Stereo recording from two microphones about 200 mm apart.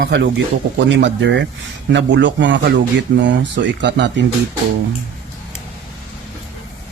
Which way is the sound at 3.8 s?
65° right (ahead or behind).